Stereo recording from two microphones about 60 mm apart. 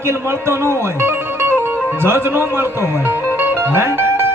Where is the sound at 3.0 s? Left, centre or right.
Right.